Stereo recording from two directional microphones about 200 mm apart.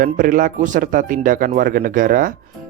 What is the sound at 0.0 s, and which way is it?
Speech, 45° right (ahead or behind).